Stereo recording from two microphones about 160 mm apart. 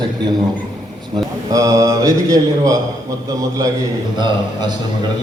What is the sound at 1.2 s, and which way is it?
A man's voice, 20° right (ahead or behind).